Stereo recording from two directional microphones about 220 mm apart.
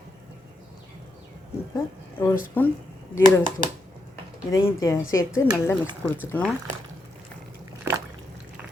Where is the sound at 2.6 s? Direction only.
10° left (ahead or behind).